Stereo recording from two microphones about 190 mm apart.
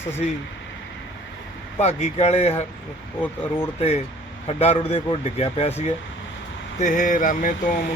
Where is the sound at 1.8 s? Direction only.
35° left (ahead or behind).